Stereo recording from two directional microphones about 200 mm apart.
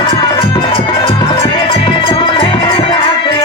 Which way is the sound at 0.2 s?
25° left (ahead or behind).